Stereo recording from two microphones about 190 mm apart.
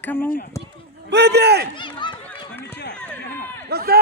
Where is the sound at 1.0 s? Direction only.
60° right (ahead or behind).